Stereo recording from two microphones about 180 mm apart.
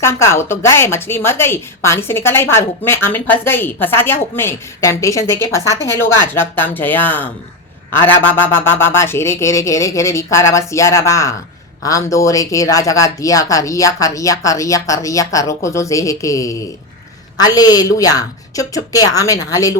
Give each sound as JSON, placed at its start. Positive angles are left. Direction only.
{"t": 0.0, "sound": "a woman's voice", "side_deg": 15}